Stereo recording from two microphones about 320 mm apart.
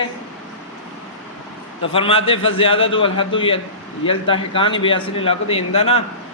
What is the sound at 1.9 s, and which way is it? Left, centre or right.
A man's voice, centre.